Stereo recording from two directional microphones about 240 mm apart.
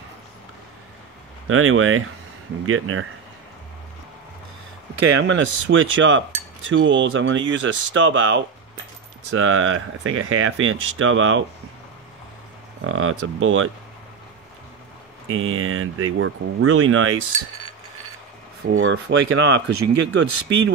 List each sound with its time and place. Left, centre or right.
1.5 s speech: right
5.2 s speech: right
12.8 s speech: right
15.3 s speech: right
18.8 s speech: right